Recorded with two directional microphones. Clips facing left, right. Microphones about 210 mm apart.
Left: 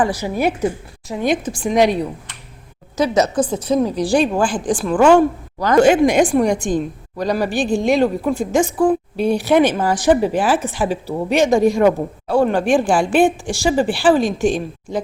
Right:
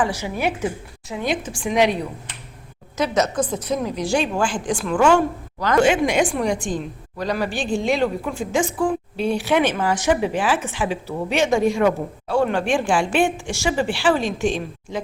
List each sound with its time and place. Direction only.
0.0 s a woman's voice: 40° left (ahead or behind)
3.0 s a woman's voice: 30° left (ahead or behind)